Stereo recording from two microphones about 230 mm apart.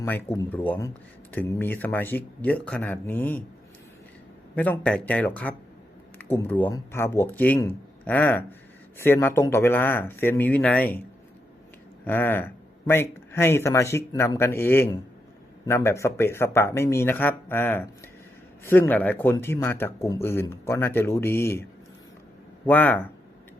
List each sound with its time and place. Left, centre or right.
0.0 s speech: centre
4.5 s speech: centre
12.0 s speech: centre